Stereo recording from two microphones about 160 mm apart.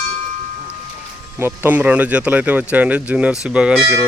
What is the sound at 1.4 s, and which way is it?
Speech, 15° right (ahead or behind).